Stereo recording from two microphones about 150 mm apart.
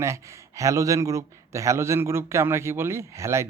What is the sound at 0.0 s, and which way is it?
A man's voice, 20° right (ahead or behind).